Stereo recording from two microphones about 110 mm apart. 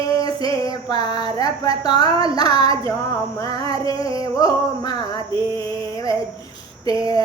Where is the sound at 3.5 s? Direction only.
50° right (ahead or behind).